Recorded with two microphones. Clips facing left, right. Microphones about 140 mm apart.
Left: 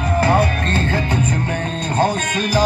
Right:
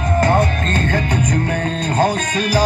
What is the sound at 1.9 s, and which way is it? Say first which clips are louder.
Music: right 1 dB; 10° right (ahead or behind).